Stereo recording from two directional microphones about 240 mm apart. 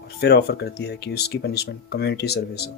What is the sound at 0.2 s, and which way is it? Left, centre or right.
Speech, left.